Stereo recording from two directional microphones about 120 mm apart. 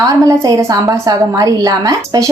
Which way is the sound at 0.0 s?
30° right (ahead or behind).